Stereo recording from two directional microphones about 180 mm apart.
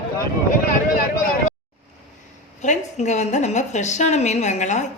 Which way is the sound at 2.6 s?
40° left (ahead or behind).